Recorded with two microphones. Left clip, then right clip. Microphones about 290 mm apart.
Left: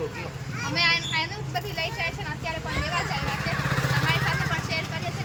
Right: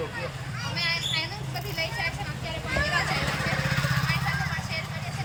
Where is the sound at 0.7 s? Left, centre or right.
Left.